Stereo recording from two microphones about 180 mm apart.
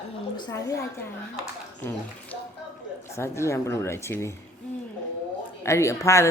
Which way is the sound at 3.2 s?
15° left (ahead or behind).